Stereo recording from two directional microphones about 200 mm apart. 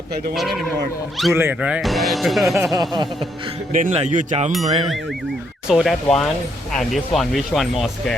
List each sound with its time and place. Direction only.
1.3 s speech: 10° right (ahead or behind)
3.7 s speech: 40° right (ahead or behind)
5.6 s speech: centre (ahead or behind)